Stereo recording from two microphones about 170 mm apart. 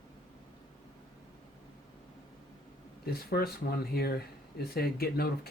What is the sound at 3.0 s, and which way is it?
Speech, 65° left (ahead or behind).